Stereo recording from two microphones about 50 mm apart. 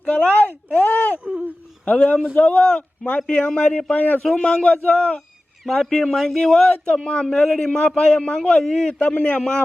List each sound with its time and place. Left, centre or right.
0.0 s speech: left
1.2 s speech: centre
1.8 s speech: left
3.9 s a man's voice: left
4.2 s speech: centre
5.6 s a man's voice: centre
9.0 s speech: left